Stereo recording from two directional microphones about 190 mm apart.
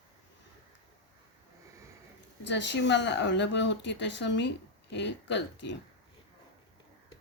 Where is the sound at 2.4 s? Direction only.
65° left (ahead or behind).